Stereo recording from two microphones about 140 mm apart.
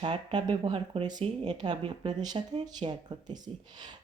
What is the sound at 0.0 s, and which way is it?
Speech, 30° right (ahead or behind).